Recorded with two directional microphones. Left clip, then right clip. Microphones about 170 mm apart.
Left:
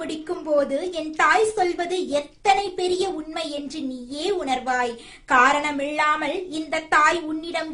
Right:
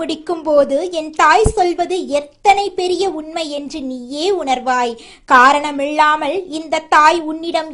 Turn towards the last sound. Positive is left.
turn(degrees=-35)  # may be behind; listen again after turning